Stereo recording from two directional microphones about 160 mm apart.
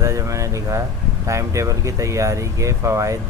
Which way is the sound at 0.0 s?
20° right (ahead or behind).